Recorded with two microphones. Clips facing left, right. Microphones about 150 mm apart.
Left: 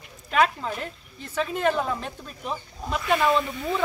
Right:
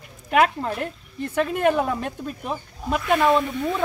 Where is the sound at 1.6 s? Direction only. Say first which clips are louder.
Right 3 dB; 15° right (ahead or behind).